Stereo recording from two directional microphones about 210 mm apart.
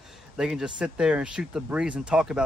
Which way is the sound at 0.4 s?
Centre (ahead or behind).